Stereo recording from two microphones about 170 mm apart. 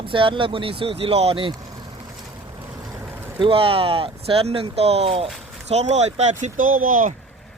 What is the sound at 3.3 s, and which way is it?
Speech, 30° right (ahead or behind).